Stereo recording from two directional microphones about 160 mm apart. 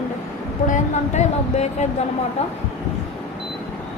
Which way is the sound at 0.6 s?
50° left (ahead or behind).